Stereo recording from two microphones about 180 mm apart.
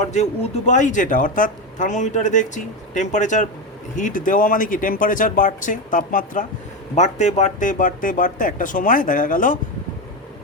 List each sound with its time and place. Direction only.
0.0 s speech: 40° left (ahead or behind)